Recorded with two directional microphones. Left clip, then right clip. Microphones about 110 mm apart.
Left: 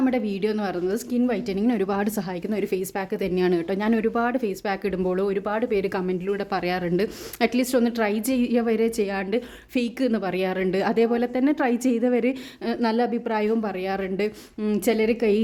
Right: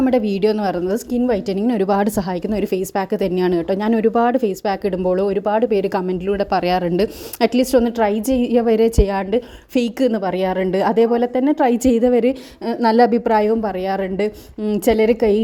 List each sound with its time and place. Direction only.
0.1 s a woman's voice: 45° right (ahead or behind)
0.5 s a woman's voice: 35° right (ahead or behind)
10.1 s a woman's voice: 25° right (ahead or behind)
11.6 s a woman's voice: 45° right (ahead or behind)
12.1 s a woman's voice: 30° right (ahead or behind)
12.9 s a woman's voice: 50° right (ahead or behind); by 14.3 s 30° right (ahead or behind)
14.8 s a woman's voice: 40° right (ahead or behind)